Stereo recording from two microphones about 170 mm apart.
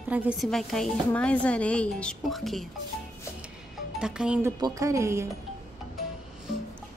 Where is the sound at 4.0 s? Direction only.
5° right (ahead or behind).